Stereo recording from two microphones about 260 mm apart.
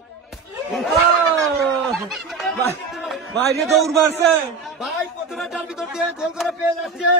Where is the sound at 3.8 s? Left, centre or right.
Right.